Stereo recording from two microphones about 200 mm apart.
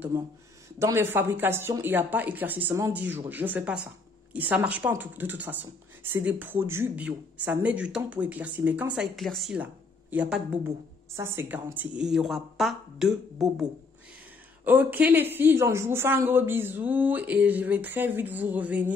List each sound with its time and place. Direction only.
0.1 s speech: 10° right (ahead or behind)